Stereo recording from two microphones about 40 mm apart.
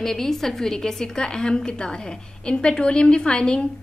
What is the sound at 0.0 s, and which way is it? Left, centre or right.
Speech, centre.